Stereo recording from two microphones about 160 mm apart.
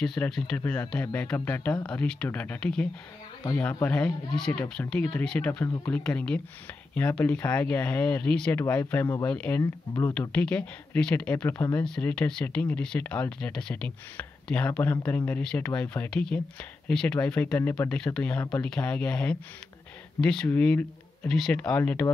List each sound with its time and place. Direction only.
0.0 s speech: 5° left (ahead or behind)
9.0 s speech: 25° left (ahead or behind)
9.3 s speech: 10° left (ahead or behind)
9.6 s speech: 20° left (ahead or behind)
10.3 s speech: 5° left (ahead or behind)